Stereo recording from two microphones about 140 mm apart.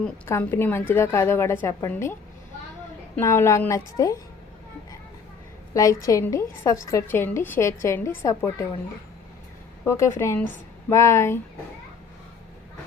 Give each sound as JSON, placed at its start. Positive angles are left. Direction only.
{"t": 0.3, "sound": "a woman's voice", "side_deg": 15}
{"t": 3.2, "sound": "a woman's voice", "side_deg": 20}
{"t": 5.7, "sound": "a woman's voice", "side_deg": 25}
{"t": 9.8, "sound": "a woman's voice", "side_deg": 20}